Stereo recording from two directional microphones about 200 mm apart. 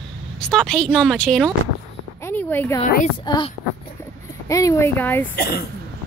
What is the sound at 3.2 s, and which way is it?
Speech, 20° left (ahead or behind).